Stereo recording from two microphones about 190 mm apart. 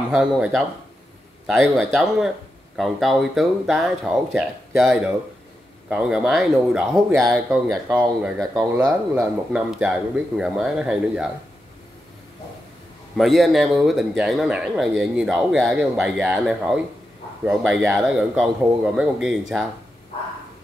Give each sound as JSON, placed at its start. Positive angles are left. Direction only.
{"t": 0.1, "sound": "a man's voice", "side_deg": -5}
{"t": 8.4, "sound": "speech", "side_deg": -20}
{"t": 9.5, "sound": "a man's voice", "side_deg": -5}
{"t": 13.1, "sound": "a man's voice", "side_deg": 0}